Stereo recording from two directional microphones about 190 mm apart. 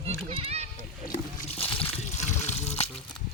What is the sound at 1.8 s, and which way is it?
Water, 35° left (ahead or behind).